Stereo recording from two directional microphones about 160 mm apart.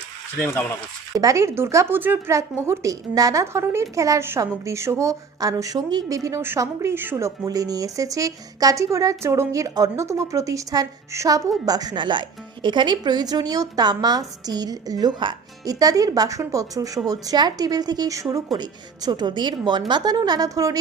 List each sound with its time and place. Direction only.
1.1 s speech: 20° right (ahead or behind)